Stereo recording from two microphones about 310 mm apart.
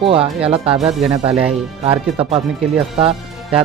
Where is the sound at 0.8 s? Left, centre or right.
Centre.